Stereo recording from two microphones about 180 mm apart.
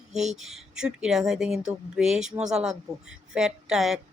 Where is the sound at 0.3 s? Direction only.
Centre (ahead or behind).